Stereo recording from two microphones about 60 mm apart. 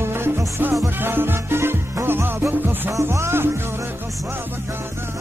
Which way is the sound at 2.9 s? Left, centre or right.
Right.